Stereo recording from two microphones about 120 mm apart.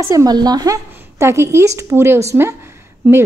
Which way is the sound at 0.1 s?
30° right (ahead or behind).